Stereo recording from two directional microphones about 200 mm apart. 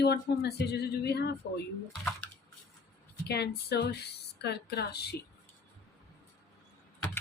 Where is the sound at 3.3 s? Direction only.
55° left (ahead or behind).